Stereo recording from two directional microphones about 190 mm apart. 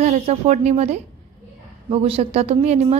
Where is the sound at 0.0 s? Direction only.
35° right (ahead or behind).